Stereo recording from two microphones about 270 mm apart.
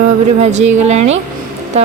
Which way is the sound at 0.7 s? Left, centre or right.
Right.